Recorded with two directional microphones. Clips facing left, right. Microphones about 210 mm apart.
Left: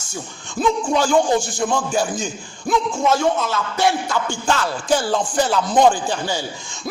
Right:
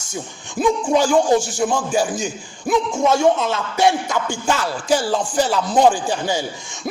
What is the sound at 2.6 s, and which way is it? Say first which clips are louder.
Speech: right 1 dB; 25° right (ahead or behind).